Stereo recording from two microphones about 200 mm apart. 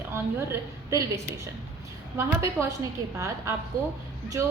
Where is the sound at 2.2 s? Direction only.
15° right (ahead or behind).